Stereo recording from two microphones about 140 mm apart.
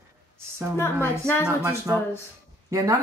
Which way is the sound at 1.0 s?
15° left (ahead or behind).